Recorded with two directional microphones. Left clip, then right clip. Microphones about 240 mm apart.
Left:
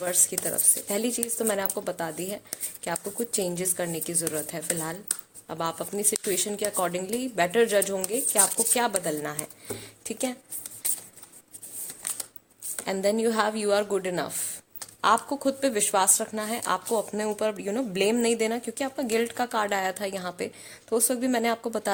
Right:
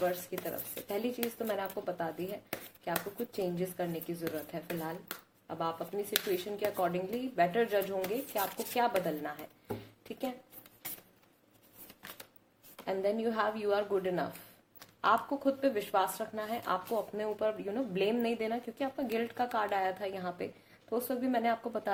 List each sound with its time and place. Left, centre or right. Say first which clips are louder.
0.3 s a woman's voice: left 9 dB; left
12.8 s a woman's voice: left 7 dB; left